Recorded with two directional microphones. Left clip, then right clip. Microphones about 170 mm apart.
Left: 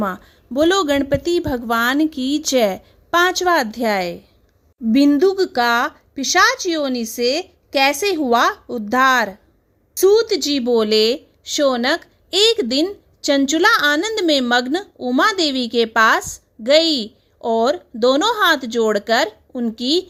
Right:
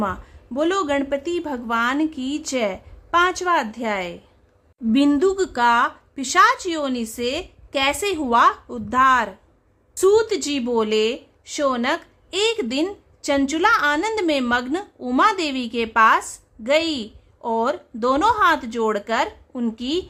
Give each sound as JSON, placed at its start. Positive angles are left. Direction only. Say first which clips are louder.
{"t": 0.0, "sound": "speech", "louder": "left 2 dB", "side_deg": 25}